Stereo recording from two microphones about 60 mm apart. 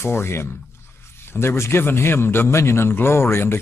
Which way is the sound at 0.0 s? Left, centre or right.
Left.